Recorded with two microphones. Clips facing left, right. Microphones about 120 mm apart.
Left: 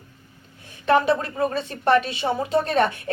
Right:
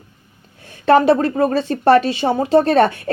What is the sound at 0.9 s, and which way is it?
A woman's voice, 35° right (ahead or behind).